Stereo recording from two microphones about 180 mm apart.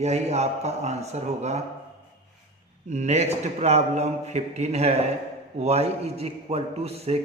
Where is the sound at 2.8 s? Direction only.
40° right (ahead or behind).